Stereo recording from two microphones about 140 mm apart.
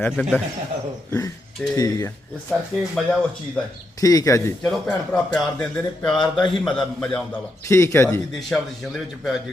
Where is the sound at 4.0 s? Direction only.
25° left (ahead or behind).